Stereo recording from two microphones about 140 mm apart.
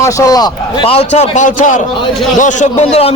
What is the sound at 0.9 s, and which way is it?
A man's voice, 50° left (ahead or behind).